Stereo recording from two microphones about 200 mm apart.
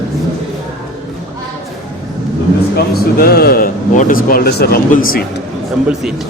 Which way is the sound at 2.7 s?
50° left (ahead or behind).